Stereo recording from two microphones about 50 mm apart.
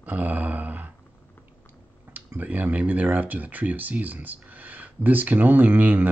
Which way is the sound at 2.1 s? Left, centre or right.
Right.